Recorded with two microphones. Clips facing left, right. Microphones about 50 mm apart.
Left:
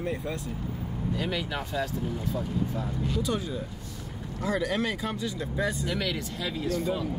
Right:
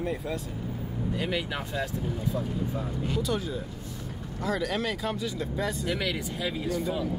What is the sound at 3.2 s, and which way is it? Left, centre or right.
Speech, centre.